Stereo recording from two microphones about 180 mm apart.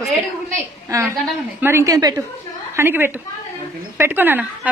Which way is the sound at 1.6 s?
15° right (ahead or behind).